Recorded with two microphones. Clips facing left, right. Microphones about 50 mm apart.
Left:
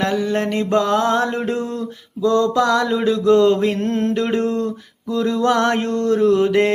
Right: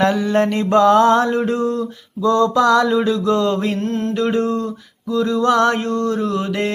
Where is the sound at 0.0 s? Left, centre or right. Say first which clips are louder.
Right 3 dB; centre.